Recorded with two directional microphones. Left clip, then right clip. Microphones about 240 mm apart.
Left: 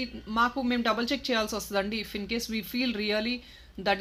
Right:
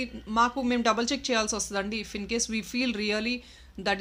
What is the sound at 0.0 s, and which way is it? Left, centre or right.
Speech, centre.